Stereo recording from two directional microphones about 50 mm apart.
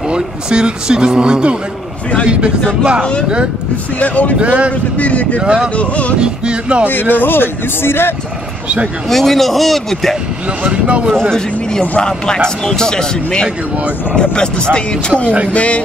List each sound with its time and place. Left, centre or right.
0.1 s speech: centre
4.0 s speech: left
4.4 s music: right
4.9 s speech: left
5.4 s music: centre
5.8 s speech: left
6.1 s music: centre
6.9 s speech: left
9.1 s a man's voice: centre
10.6 s music: right
11.1 s a man's voice: centre; by 15.8 s left